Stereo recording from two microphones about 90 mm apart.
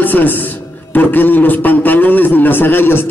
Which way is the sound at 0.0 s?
20° left (ahead or behind).